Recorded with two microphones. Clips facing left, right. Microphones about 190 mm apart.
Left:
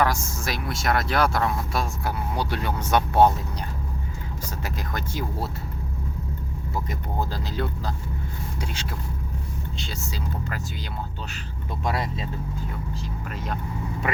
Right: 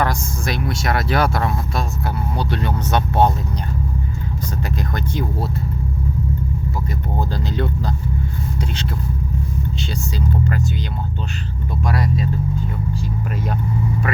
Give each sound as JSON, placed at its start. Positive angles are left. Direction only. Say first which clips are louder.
{"t": 0.0, "sound": "speech", "louder": "right 2 dB", "side_deg": 5}
{"t": 4.9, "sound": "speech", "louder": "right 3 dB", "side_deg": 5}
{"t": 11.9, "sound": "speech", "louder": "right 6 dB", "side_deg": 25}